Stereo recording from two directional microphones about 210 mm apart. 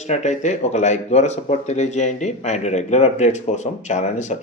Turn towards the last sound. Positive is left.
turn(degrees=35)  # may be behind; listen again after turning